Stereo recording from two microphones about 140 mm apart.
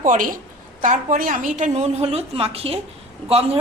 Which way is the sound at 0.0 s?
75° right (ahead or behind).